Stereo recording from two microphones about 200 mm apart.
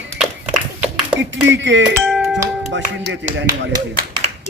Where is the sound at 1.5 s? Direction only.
65° right (ahead or behind).